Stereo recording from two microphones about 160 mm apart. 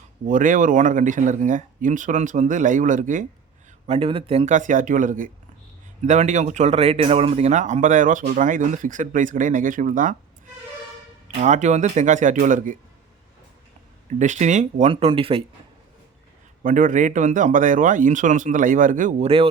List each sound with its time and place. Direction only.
0.3 s a man's voice: 55° right (ahead or behind)
3.8 s a man's voice: 40° right (ahead or behind); by 10.2 s 55° right (ahead or behind)
11.3 s a man's voice: 50° right (ahead or behind)
14.1 s a man's voice: 50° right (ahead or behind)
16.6 s a man's voice: 55° right (ahead or behind)